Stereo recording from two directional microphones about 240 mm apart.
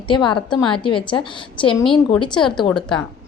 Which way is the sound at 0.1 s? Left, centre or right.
Centre.